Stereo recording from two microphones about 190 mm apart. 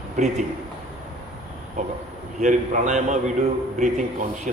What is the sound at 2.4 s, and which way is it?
A man's voice, 40° right (ahead or behind).